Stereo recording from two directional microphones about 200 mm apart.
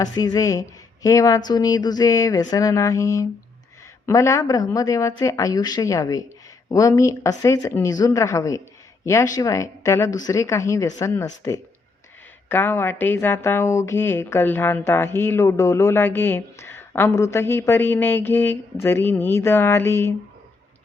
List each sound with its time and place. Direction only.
0.0 s speech: 20° left (ahead or behind)